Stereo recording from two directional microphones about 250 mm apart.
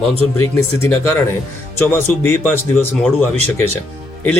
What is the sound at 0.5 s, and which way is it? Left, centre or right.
A man's voice, centre.